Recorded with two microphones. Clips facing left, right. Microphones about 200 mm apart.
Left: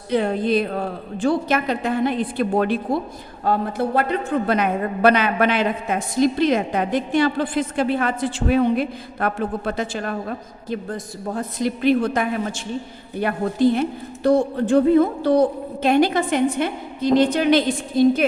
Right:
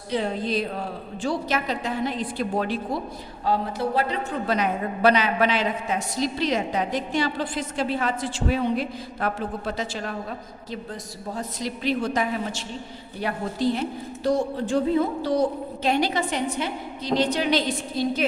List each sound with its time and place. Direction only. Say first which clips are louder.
0.1 s a woman's voice: left 6 dB; 55° left (ahead or behind)